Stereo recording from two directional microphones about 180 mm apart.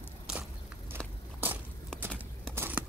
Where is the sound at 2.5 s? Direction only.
10° right (ahead or behind).